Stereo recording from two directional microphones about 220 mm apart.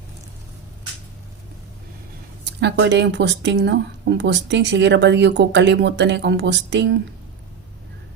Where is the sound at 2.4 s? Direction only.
50° right (ahead or behind).